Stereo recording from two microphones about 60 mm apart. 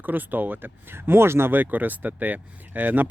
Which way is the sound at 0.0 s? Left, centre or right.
Right.